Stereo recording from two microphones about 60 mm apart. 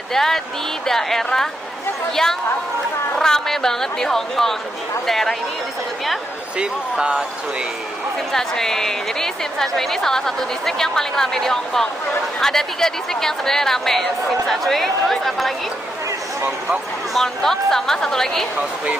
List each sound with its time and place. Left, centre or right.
0.1 s a woman's voice: centre
3.2 s a woman's voice: centre
6.6 s speech: centre
8.3 s a woman's voice: centre
17.1 s a woman's voice: centre